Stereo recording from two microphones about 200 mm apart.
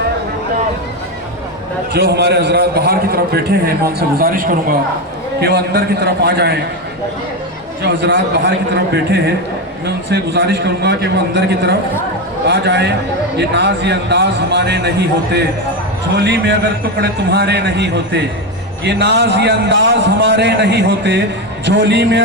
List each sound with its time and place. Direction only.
1.9 s a man's voice: 55° right (ahead or behind)
7.8 s a man's voice: 60° right (ahead or behind)